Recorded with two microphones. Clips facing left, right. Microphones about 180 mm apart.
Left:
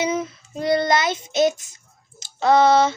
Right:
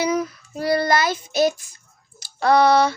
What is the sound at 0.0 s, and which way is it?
Child singing, 25° left (ahead or behind).